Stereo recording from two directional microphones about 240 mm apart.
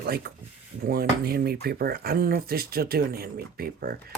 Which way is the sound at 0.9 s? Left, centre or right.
Right.